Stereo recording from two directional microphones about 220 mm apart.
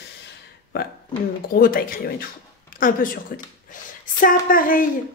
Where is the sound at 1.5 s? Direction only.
40° left (ahead or behind).